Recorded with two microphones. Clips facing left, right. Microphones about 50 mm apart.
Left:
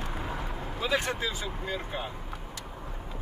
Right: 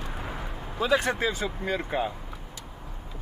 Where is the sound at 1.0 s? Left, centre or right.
Right.